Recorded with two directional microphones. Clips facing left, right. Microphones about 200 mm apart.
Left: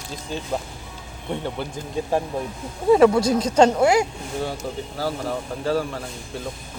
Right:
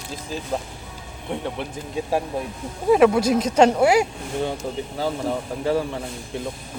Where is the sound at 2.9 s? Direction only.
5° right (ahead or behind).